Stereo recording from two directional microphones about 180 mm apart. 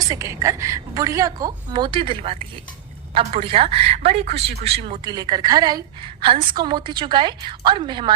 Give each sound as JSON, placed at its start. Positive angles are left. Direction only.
{"t": 0.1, "sound": "a woman's voice", "side_deg": -15}